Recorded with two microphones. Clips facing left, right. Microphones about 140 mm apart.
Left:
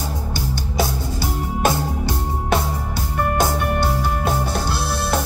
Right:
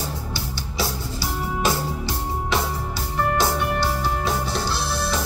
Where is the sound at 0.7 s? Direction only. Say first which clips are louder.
Left 4 dB; 50° left (ahead or behind).